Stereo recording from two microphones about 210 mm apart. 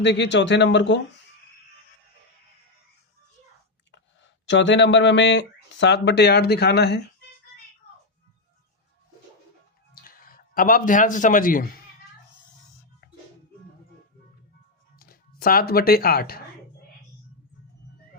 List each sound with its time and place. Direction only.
0.0 s speech: 55° left (ahead or behind)
3.9 s speech: 60° left (ahead or behind)
9.9 s speech: 45° left (ahead or behind)
14.9 s speech: 45° left (ahead or behind)